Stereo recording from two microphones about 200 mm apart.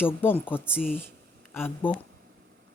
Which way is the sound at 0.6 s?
5° right (ahead or behind).